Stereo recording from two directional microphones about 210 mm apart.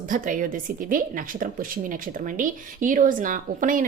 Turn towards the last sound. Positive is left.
turn(degrees=-40)  # may be behind; listen again after turning